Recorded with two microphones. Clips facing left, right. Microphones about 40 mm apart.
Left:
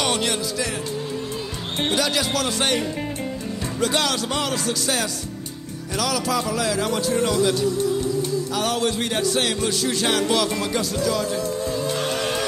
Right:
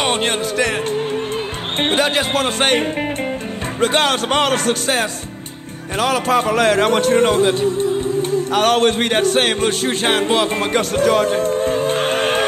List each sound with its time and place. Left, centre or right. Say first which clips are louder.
0.0 s music: right 5 dB; right
1.8 s speech: right 5 dB; right
3.8 s a man's voice: right 6 dB; right